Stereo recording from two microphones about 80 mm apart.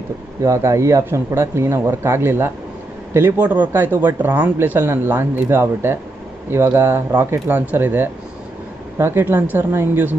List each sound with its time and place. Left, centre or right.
0.4 s speech: right
3.3 s speech: centre
7.2 s speech: right